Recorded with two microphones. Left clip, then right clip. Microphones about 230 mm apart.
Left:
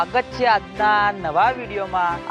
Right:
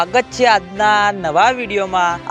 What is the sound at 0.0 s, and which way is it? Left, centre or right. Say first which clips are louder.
Speech: right 5 dB; right.